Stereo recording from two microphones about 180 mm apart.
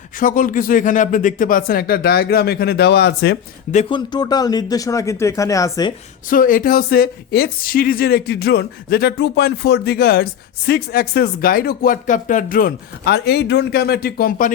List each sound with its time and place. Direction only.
0.2 s speech: 50° left (ahead or behind); by 3.3 s 70° left (ahead or behind)
3.8 s speech: 25° left (ahead or behind)
6.3 s speech: 50° left (ahead or behind)